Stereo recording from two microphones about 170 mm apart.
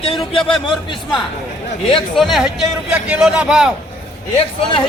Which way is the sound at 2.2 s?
Centre (ahead or behind).